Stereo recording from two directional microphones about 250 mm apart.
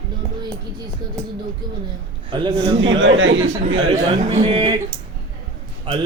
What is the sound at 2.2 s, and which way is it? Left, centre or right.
Speech, centre.